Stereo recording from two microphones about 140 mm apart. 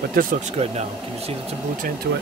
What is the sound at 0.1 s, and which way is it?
Speech, 90° right.